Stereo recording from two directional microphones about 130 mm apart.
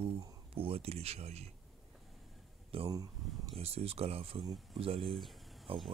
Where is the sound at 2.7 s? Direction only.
45° right (ahead or behind).